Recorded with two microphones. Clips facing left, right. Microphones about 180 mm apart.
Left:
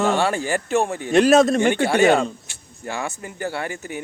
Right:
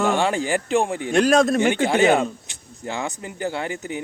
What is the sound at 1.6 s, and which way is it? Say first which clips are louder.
Speech: left 1 dB; 15° right (ahead or behind).